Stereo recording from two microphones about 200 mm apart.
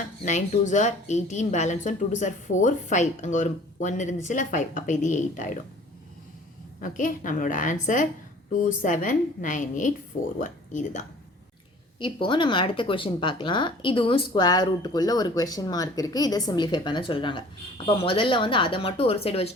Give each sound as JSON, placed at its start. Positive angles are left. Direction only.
{"t": 0.3, "sound": "a woman's voice", "side_deg": 40}
{"t": 6.8, "sound": "a woman's voice", "side_deg": 40}
{"t": 11.9, "sound": "speech", "side_deg": 25}